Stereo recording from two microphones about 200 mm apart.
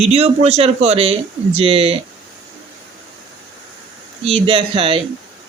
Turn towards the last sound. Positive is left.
turn(degrees=-25)  # may be behind; listen again after turning